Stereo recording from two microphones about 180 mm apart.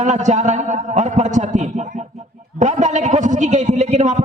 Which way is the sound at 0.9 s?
40° right (ahead or behind).